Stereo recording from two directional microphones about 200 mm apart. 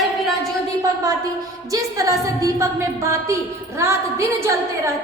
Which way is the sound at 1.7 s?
15° right (ahead or behind).